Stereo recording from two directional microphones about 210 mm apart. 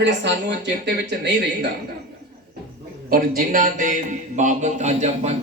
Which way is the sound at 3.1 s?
40° right (ahead or behind).